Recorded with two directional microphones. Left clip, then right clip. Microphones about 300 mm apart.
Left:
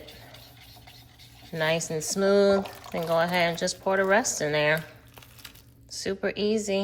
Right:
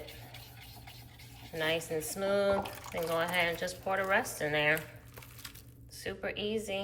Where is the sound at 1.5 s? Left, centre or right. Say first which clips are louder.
Left 6 dB; centre.